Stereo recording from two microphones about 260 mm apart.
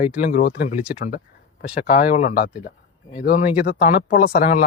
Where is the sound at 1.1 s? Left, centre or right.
Left.